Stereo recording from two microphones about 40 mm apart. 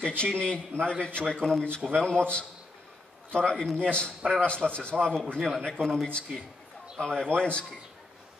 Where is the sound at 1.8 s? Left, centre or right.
Centre.